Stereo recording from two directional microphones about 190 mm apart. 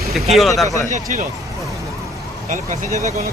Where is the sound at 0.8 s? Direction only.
40° right (ahead or behind).